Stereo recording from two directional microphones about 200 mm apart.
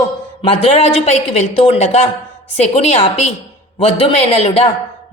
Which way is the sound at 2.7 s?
30° left (ahead or behind).